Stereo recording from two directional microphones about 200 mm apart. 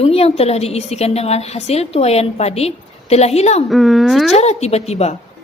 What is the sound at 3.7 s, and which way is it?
Speech, centre (ahead or behind).